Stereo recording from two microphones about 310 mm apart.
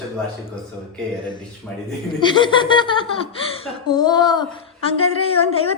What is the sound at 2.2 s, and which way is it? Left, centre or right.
Speech, centre.